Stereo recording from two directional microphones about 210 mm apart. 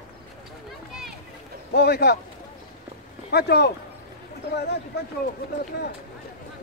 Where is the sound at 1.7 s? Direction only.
50° left (ahead or behind).